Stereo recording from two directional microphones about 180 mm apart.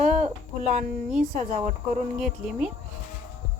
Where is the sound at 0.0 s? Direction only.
45° right (ahead or behind).